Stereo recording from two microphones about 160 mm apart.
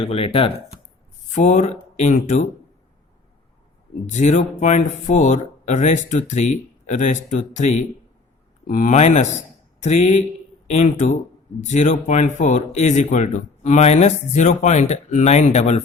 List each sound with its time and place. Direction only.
0.0 s speech: 35° left (ahead or behind)
1.3 s speech: 50° left (ahead or behind)
4.1 s speech: 50° left (ahead or behind)